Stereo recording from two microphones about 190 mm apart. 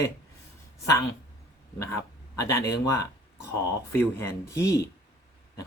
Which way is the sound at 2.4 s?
15° left (ahead or behind).